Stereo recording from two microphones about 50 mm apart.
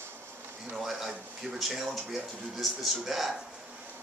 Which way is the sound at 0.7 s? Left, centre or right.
Centre.